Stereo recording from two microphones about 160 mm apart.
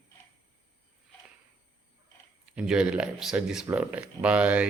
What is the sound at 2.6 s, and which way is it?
Speech, 5° right (ahead or behind).